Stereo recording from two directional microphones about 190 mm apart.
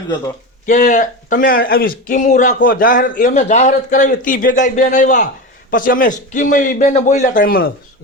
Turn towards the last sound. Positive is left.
turn(degrees=50)  # may be behind; listen again after turning